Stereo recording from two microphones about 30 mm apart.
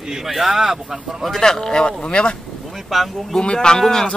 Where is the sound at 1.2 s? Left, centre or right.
Centre; by 2.4 s left.